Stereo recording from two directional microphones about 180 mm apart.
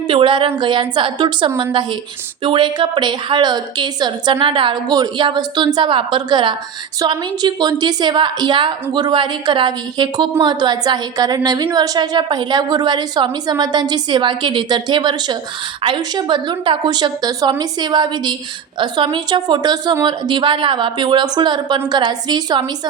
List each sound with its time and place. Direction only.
0.1 s a woman's voice: 30° right (ahead or behind)